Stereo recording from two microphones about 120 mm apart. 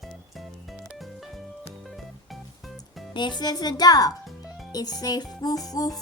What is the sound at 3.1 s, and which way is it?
Speech, 40° left (ahead or behind).